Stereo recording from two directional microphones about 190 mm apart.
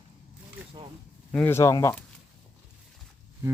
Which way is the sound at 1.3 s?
10° left (ahead or behind).